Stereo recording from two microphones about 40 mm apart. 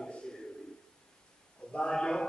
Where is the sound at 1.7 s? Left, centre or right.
Left.